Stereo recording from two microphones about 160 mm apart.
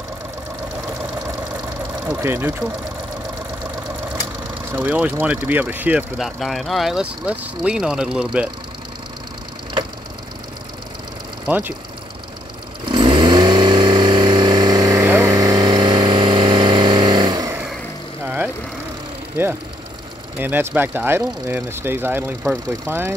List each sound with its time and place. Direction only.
2.0 s speech: 15° right (ahead or behind)
4.7 s speech: 10° right (ahead or behind)
11.4 s speech: 10° right (ahead or behind)
12.8 s vehicle: 30° right (ahead or behind)
18.2 s vehicle: 10° right (ahead or behind)
20.3 s speech: 10° right (ahead or behind)